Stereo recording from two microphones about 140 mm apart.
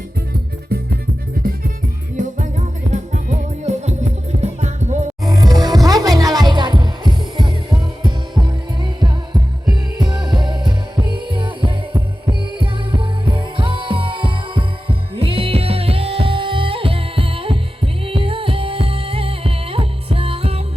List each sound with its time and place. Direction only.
0.7 s music: 90° right
2.1 s music: 65° right (ahead or behind)
5.2 s music: 25° right (ahead or behind); by 20.6 s 45° right (ahead or behind)